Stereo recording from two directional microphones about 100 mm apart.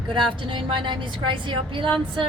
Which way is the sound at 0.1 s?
55° right (ahead or behind).